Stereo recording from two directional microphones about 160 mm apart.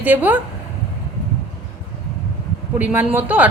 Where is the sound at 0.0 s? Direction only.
10° right (ahead or behind).